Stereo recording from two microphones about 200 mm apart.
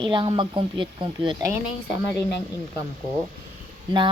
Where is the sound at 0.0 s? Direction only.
25° right (ahead or behind).